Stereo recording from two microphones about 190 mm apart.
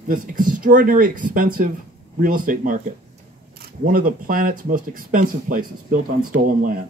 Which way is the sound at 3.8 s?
50° right (ahead or behind).